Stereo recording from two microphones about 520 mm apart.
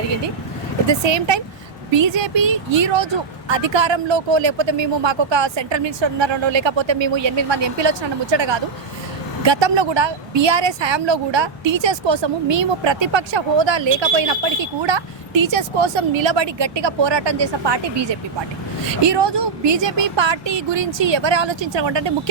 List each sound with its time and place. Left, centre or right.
0.9 s a woman's voice: right